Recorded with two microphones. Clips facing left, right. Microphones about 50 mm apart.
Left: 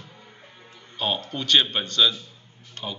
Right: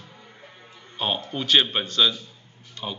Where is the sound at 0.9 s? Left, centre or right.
Centre.